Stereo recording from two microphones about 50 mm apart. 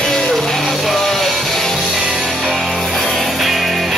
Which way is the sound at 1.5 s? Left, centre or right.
Centre.